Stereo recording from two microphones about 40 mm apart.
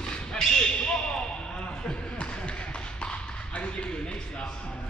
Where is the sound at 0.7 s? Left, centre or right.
Left.